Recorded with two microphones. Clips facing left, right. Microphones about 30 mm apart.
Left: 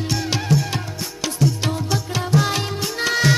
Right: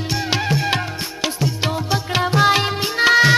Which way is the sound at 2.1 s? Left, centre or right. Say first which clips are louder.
Right 6 dB; right.